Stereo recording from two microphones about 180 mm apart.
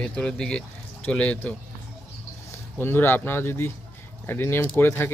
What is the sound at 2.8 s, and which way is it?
Speech, 10° left (ahead or behind).